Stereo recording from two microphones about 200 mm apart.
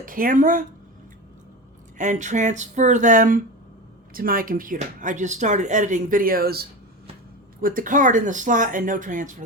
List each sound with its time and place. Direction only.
0.0 s speech: 45° right (ahead or behind)
2.0 s speech: 40° right (ahead or behind)